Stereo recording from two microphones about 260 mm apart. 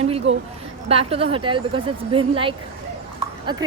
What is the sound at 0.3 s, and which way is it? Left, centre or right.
Speech, right.